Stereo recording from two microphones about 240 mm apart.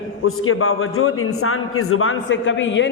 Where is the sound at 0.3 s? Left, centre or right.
Left.